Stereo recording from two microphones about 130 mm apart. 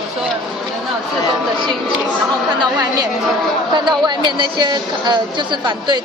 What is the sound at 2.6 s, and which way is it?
Speech, 30° right (ahead or behind).